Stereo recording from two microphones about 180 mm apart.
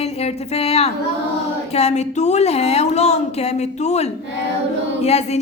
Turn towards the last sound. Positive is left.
turn(degrees=35)  # may be behind; listen again after turning